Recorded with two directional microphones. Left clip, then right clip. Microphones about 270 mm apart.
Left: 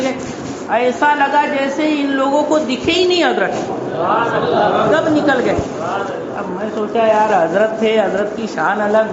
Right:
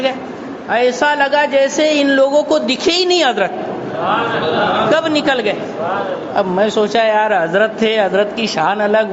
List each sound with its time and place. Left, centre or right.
0.7 s a woman's voice: right
4.9 s a woman's voice: right
6.9 s a woman's voice: right